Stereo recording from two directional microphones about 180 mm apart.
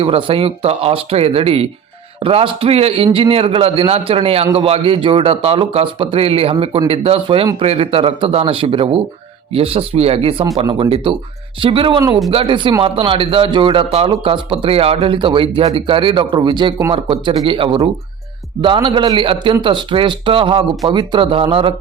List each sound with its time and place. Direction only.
0.0 s speech: 30° right (ahead or behind)